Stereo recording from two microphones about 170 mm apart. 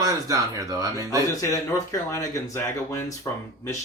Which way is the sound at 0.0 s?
20° right (ahead or behind).